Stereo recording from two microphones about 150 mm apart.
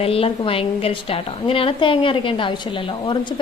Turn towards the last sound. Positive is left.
turn(degrees=30)  # may be behind; listen again after turning